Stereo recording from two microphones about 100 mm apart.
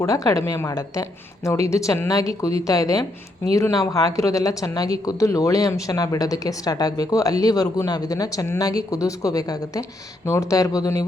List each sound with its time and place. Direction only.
0.0 s speech: 35° left (ahead or behind)
10.2 s speech: 30° left (ahead or behind)